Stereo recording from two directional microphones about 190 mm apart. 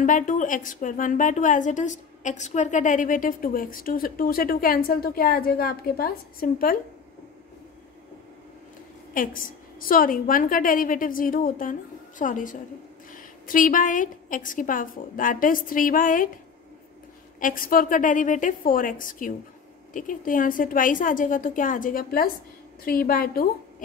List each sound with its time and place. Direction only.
0.0 s a woman's voice: 45° left (ahead or behind)
9.1 s a woman's voice: 45° left (ahead or behind)
17.4 s a woman's voice: 45° left (ahead or behind)